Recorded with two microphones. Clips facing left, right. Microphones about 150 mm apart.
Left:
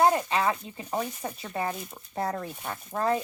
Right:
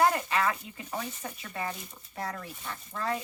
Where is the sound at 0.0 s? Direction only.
30° left (ahead or behind).